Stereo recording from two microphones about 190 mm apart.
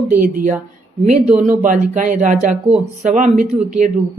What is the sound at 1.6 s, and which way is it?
Speech, 45° right (ahead or behind).